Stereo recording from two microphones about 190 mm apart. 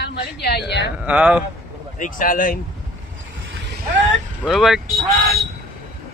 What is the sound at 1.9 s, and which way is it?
Speech, 45° left (ahead or behind).